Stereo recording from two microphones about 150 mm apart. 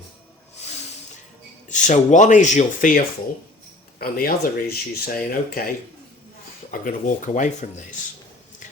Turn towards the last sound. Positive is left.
turn(degrees=55)  # may be behind; listen again after turning